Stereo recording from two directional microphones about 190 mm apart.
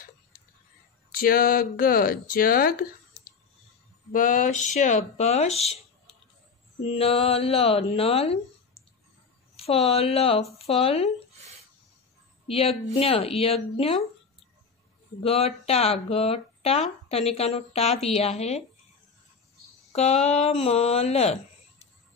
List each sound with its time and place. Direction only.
1.1 s speech: 50° left (ahead or behind)
6.8 s speech: 30° left (ahead or behind)
12.4 s speech: 30° left (ahead or behind)
15.1 s speech: 30° left (ahead or behind)
19.9 s speech: 35° left (ahead or behind)